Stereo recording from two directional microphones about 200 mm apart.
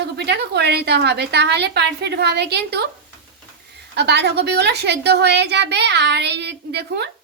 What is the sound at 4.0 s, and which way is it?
A child's voice, 55° right (ahead or behind).